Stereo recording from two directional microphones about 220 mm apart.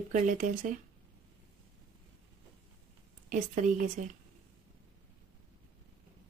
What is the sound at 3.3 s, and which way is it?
Speech, 35° right (ahead or behind).